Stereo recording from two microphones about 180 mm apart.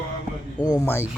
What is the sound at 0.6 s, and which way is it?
Speech, 15° left (ahead or behind).